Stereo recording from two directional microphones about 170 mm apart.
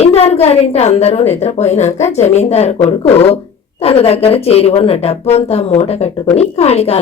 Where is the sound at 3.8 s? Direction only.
35° left (ahead or behind).